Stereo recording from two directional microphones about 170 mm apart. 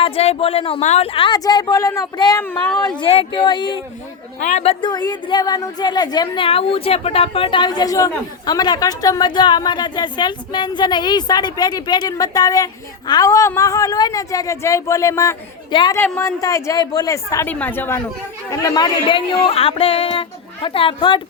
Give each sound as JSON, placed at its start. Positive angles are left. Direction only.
{"t": 0.0, "sound": "speech", "side_deg": 35}
{"t": 2.4, "sound": "a woman's voice", "side_deg": 10}
{"t": 3.0, "sound": "speech", "side_deg": 35}
{"t": 4.4, "sound": "speech", "side_deg": 45}
{"t": 16.0, "sound": "a woman's voice", "side_deg": 5}
{"t": 16.2, "sound": "a woman's voice", "side_deg": 20}